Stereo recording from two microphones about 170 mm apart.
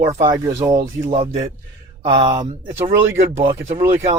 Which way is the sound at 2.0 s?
25° right (ahead or behind).